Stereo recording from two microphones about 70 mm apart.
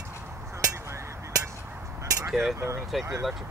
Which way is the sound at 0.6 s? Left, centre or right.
Right.